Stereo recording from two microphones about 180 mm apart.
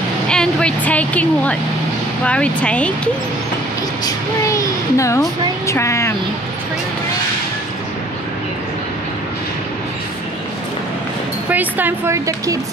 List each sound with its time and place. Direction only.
0.3 s speech: 5° left (ahead or behind)
4.0 s speech: 15° left (ahead or behind)
11.5 s speech: 10° right (ahead or behind)